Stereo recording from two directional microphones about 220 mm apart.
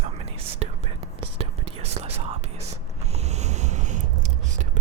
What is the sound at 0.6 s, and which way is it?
Whispering, 30° right (ahead or behind).